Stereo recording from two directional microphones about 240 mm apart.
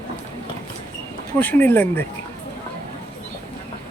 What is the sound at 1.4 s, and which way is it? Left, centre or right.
Speech, centre.